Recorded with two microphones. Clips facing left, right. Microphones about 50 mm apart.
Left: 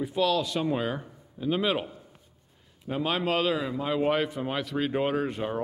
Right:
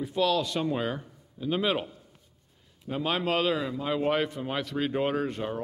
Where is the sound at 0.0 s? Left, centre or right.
Centre.